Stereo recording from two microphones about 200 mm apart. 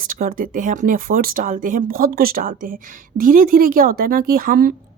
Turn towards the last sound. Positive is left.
turn(degrees=-45)  # may be behind; listen again after turning